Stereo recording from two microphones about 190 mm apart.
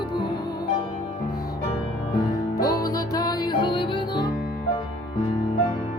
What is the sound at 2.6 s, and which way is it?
Music, 20° left (ahead or behind).